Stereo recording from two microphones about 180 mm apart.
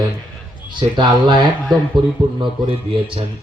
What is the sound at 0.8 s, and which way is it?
Speech, 25° right (ahead or behind).